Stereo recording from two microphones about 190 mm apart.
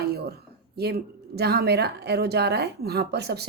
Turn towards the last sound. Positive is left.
turn(degrees=-60)  # may be behind; listen again after turning